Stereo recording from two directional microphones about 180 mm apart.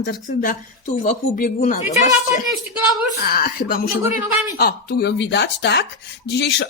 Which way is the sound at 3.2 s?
60° left (ahead or behind).